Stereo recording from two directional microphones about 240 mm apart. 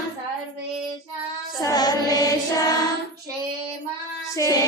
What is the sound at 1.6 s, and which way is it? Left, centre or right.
Child singing, centre.